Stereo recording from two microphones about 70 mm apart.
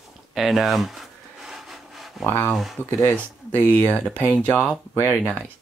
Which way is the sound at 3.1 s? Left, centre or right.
Left.